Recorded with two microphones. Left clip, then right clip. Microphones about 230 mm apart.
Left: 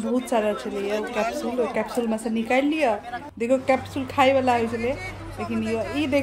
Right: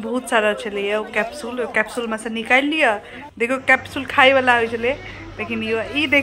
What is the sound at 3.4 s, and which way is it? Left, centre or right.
Speech, right.